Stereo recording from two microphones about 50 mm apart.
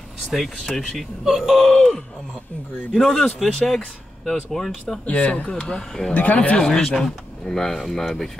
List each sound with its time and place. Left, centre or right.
0.7 s speech: centre
5.0 s speech: left
6.1 s speech: left; by 8.3 s centre